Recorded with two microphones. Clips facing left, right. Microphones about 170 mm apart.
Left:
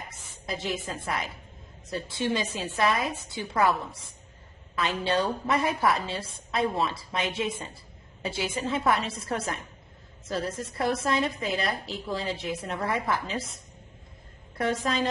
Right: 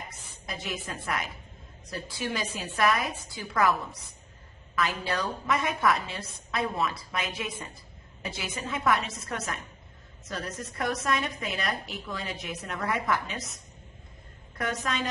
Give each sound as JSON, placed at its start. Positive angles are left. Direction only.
{"t": 0.5, "sound": "a woman's voice", "side_deg": 25}
{"t": 14.6, "sound": "a woman's voice", "side_deg": 30}